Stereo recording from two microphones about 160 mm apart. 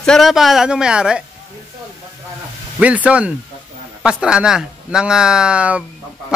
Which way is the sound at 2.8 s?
10° right (ahead or behind).